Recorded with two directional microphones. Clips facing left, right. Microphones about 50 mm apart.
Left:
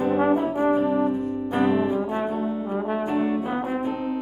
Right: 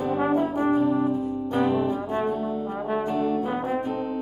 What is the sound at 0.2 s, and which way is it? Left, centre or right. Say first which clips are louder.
Brass instrument: left 2 dB; centre.